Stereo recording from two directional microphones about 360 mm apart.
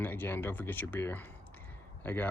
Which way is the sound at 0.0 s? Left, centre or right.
Centre.